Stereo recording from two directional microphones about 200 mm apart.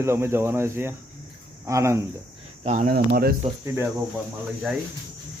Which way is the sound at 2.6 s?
40° right (ahead or behind).